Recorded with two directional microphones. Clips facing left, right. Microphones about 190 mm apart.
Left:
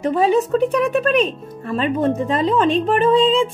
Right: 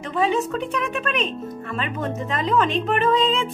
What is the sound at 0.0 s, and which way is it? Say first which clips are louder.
Speech: left 6 dB; 35° left (ahead or behind).